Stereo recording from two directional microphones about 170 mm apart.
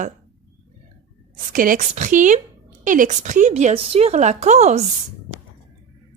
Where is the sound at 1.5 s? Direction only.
55° right (ahead or behind).